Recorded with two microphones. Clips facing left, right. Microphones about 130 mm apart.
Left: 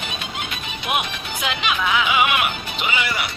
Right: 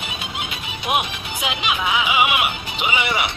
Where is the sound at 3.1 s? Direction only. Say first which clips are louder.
Right 3 dB; 65° right (ahead or behind).